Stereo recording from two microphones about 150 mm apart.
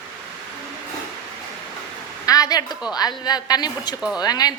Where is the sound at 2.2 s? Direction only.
25° left (ahead or behind).